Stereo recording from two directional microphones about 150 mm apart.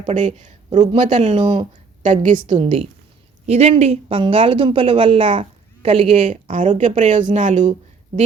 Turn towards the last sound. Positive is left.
turn(degrees=-50)  # may be behind; listen again after turning